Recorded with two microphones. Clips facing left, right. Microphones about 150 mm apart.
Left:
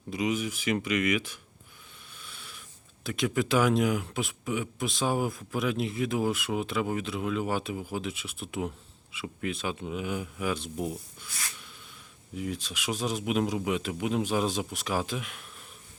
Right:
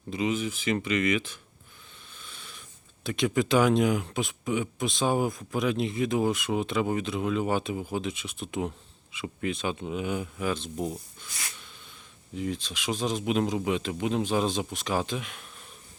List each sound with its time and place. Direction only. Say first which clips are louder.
0.1 s speech: right 1 dB; 10° left (ahead or behind)